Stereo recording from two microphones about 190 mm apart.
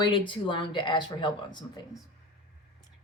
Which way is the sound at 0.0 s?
25° left (ahead or behind).